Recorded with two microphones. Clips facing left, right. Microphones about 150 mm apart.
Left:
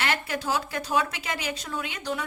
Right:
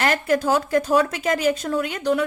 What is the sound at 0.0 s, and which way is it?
A woman's voice, 45° right (ahead or behind).